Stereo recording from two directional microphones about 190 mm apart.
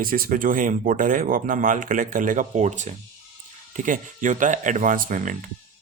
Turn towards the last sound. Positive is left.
turn(degrees=-45)  # may be behind; listen again after turning